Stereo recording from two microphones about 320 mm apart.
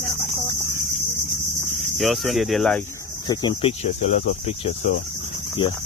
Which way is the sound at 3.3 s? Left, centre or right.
Centre.